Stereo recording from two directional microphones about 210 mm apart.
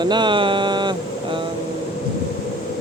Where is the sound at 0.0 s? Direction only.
20° right (ahead or behind).